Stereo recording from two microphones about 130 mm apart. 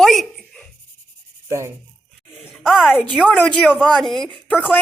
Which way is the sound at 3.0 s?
10° left (ahead or behind).